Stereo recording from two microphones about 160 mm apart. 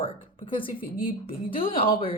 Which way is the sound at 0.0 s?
35° left (ahead or behind).